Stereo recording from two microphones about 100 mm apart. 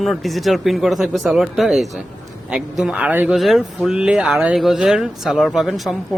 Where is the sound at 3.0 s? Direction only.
15° right (ahead or behind).